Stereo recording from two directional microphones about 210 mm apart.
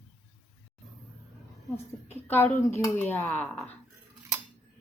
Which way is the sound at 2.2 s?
10° left (ahead or behind).